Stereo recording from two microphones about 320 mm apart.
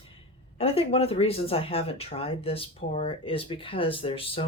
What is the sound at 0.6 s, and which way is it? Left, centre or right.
Speech, centre.